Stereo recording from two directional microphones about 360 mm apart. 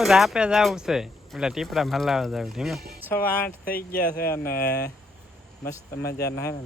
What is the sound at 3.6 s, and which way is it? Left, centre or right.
Speech, left.